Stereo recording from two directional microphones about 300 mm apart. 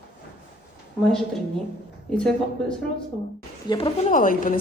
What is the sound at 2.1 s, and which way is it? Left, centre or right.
Speech, centre.